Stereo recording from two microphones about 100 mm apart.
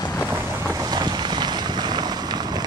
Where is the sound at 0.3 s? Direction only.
25° right (ahead or behind).